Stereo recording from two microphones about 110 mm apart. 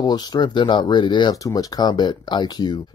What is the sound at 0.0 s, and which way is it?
Speech, 40° left (ahead or behind).